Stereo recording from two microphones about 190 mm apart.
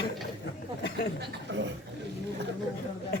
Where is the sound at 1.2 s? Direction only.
70° right (ahead or behind).